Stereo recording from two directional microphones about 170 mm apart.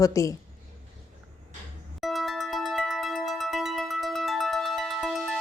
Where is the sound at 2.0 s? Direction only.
Centre (ahead or behind).